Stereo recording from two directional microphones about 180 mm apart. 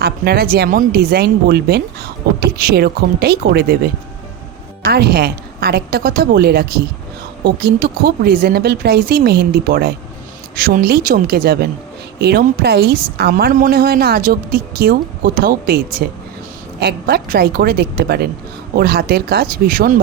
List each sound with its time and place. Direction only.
0.0 s a woman's voice: 60° right (ahead or behind)